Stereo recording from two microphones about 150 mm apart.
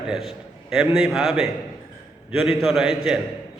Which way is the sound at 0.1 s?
Centre (ahead or behind).